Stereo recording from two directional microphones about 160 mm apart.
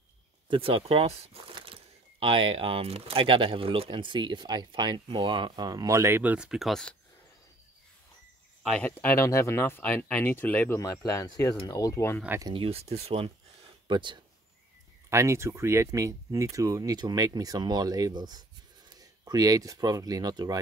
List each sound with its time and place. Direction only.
0.5 s speech: 35° right (ahead or behind); by 7.0 s 5° left (ahead or behind)
8.7 s speech: 10° left (ahead or behind)
12.4 s speech: 25° right (ahead or behind)
12.6 s speech: 40° right (ahead or behind)
13.8 s speech: 30° right (ahead or behind)
15.0 s speech: 20° right (ahead or behind)